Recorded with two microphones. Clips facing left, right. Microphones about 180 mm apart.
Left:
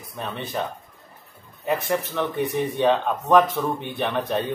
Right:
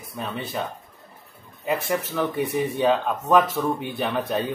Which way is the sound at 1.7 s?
5° right (ahead or behind).